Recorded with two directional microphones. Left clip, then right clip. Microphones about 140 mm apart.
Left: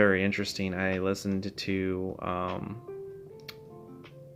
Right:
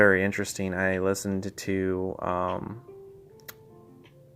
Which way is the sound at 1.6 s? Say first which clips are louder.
Right 4 dB; 30° right (ahead or behind).